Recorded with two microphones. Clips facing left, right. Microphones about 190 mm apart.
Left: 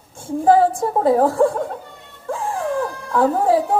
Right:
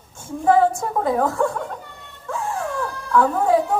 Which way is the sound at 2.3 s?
30° left (ahead or behind).